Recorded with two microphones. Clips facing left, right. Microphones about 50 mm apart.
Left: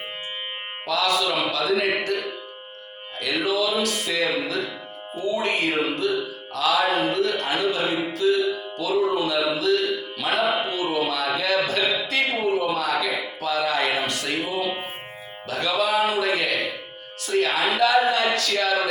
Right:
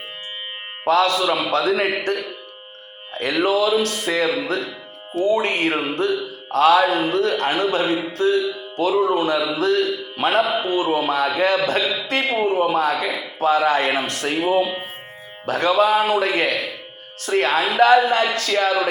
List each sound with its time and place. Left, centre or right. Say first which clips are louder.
0.9 s a man's voice: right 6 dB; right
3.2 s a man's voice: right 5 dB; right
8.1 s music: right 2 dB; right
9.4 s mantra: right 2 dB; right
10.7 s a man's voice: right 5 dB; right